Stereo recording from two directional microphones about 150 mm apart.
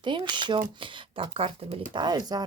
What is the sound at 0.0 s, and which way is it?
Speech, 30° right (ahead or behind).